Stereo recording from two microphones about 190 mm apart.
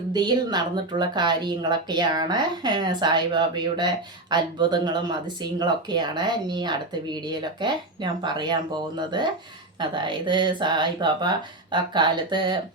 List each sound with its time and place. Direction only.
0.1 s a woman's voice: 20° right (ahead or behind)